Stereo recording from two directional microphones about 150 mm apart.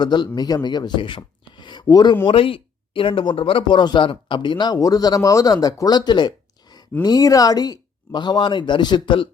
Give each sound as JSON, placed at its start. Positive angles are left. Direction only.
{"t": 0.0, "sound": "speech", "side_deg": 30}